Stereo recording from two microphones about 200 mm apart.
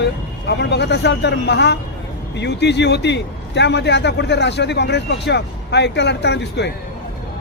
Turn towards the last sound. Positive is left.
turn(degrees=60)  # may be behind; listen again after turning